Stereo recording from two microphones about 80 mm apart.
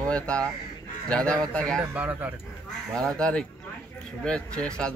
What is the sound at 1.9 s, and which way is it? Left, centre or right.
Speech, centre.